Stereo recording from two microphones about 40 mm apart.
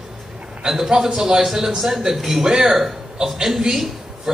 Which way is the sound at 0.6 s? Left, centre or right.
Centre.